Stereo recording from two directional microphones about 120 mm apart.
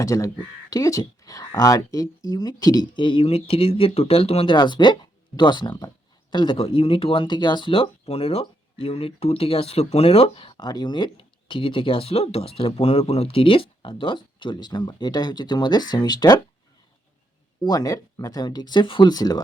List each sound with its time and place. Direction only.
0.0 s speech: 25° left (ahead or behind)
6.6 s speech: 50° left (ahead or behind); by 16.4 s 35° left (ahead or behind)
17.6 s speech: 30° left (ahead or behind)